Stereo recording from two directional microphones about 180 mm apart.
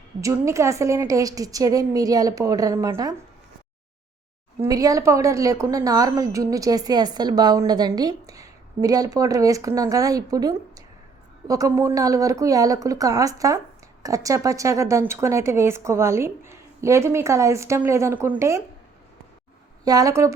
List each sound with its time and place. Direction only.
0.2 s a woman's voice: 15° right (ahead or behind)
4.6 s a woman's voice: 20° right (ahead or behind)
19.8 s a woman's voice: 20° right (ahead or behind)